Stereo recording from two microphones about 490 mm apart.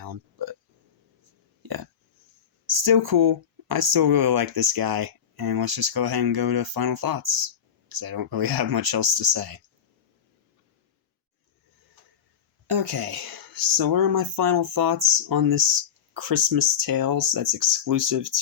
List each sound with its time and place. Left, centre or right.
0.0 s a sound: right
1.6 s burping: right
2.7 s speech: right
12.6 s speech: right
15.2 s speech: right